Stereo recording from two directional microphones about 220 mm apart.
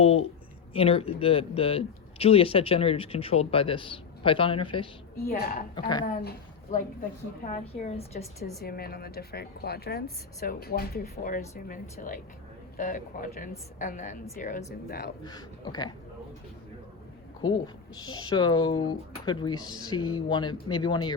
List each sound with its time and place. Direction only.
0.0 s speech: 25° left (ahead or behind)
5.2 s speech: 45° left (ahead or behind)
5.7 s speech: 20° left (ahead or behind)
6.1 s speech: 45° left (ahead or behind)
7.4 s speech: 30° left (ahead or behind)
8.6 s speech: 45° left (ahead or behind)
15.2 s speech: 20° left (ahead or behind)
18.1 s speech: 20° left (ahead or behind)